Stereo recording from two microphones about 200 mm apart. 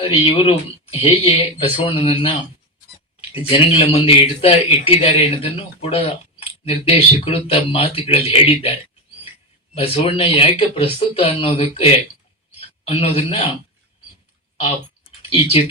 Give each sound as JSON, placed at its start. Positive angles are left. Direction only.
{"t": 0.0, "sound": "a man's voice", "side_deg": 25}
{"t": 3.5, "sound": "a man's voice", "side_deg": 25}